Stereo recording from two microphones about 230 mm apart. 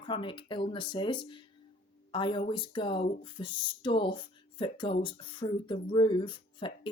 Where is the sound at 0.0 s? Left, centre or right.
Left.